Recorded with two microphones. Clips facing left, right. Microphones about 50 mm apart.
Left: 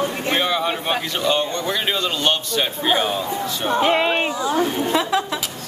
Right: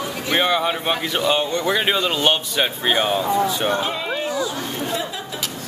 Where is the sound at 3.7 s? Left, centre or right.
Left.